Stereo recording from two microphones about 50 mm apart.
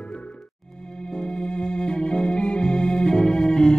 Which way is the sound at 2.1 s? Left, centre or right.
Left.